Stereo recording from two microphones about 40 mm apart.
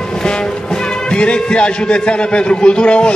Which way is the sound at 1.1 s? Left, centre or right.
Left.